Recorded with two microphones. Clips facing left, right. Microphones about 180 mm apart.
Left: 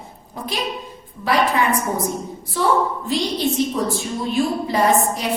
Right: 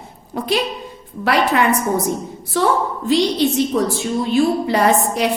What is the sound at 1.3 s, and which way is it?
Speech, 70° right (ahead or behind).